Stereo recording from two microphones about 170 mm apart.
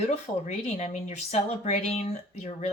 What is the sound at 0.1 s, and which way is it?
Speech, 40° left (ahead or behind).